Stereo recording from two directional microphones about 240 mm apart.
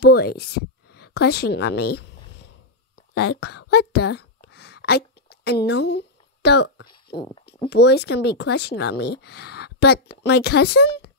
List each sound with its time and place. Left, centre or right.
0.0 s a woman's voice: left
3.0 s a sound: left
7.2 s speech: left
7.7 s speech: left